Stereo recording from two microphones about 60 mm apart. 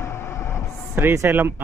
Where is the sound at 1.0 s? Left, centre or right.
Right.